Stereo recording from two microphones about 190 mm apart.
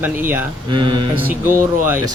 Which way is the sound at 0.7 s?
25° right (ahead or behind).